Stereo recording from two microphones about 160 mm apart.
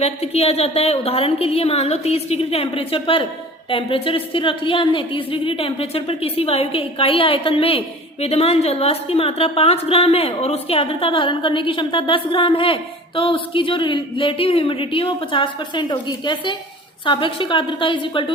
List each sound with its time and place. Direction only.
0.0 s a woman's voice: 40° left (ahead or behind)